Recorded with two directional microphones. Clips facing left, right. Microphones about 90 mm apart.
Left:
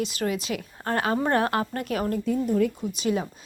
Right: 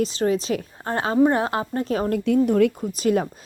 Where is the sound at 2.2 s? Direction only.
90° right.